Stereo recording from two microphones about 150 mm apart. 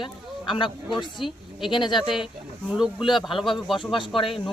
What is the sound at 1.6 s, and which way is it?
Speech, 30° left (ahead or behind).